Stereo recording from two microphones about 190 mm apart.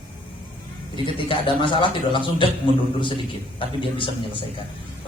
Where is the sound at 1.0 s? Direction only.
25° left (ahead or behind).